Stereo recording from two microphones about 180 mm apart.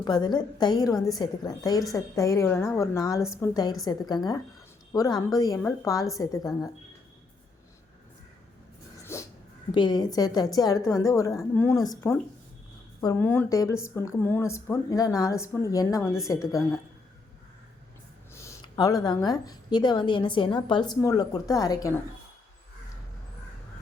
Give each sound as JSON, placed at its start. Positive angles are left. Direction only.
{"t": 0.0, "sound": "a woman's voice", "side_deg": 25}
{"t": 9.1, "sound": "dog", "side_deg": 15}
{"t": 9.7, "sound": "a woman's voice", "side_deg": 25}
{"t": 18.3, "sound": "a woman's voice", "side_deg": 20}